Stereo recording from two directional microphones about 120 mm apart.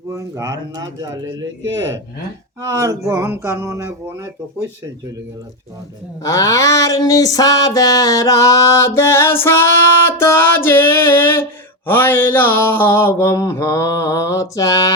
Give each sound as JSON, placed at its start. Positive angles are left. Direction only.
{"t": 0.1, "sound": "speech", "side_deg": -25}
{"t": 2.6, "sound": "speech", "side_deg": -25}
{"t": 6.2, "sound": "a sound", "side_deg": 25}